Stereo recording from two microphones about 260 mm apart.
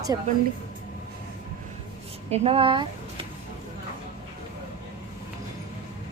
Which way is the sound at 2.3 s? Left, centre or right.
Right.